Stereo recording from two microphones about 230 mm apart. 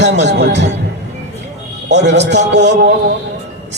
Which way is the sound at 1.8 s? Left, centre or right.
Right.